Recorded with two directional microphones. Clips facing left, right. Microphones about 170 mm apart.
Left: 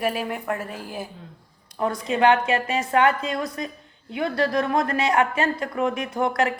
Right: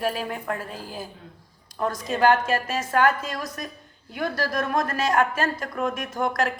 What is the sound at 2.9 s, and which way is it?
Speech, 25° left (ahead or behind).